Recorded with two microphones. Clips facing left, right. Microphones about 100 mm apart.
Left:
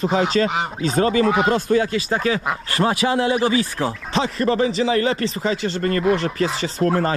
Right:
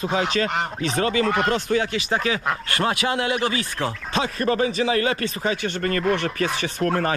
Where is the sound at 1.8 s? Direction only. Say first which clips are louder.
Left 3 dB; 35° left (ahead or behind).